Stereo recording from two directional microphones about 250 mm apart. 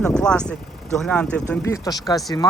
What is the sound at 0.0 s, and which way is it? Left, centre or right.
Speech, centre.